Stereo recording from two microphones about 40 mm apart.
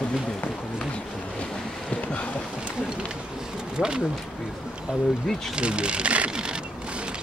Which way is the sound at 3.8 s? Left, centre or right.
Right.